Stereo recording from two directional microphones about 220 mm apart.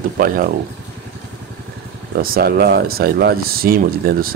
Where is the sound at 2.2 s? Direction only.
45° right (ahead or behind).